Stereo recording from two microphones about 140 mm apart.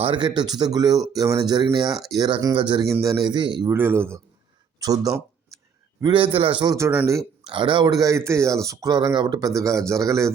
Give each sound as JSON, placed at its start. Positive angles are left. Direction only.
{"t": 0.0, "sound": "speech", "side_deg": -35}
{"t": 2.9, "sound": "speech", "side_deg": -20}
{"t": 3.7, "sound": "speech", "side_deg": -15}
{"t": 4.8, "sound": "a sound", "side_deg": -25}
{"t": 6.0, "sound": "speech", "side_deg": -35}
{"t": 6.7, "sound": "speech", "side_deg": -20}
{"t": 7.4, "sound": "speech", "side_deg": -35}